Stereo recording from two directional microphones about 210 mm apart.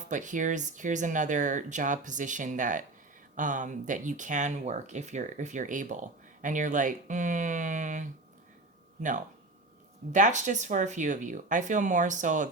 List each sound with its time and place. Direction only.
0.1 s speech: 35° right (ahead or behind)